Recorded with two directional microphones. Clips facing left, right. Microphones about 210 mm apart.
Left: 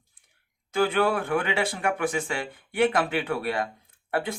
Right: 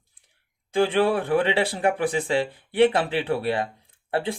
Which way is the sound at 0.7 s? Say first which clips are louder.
Right 3 dB; 30° right (ahead or behind).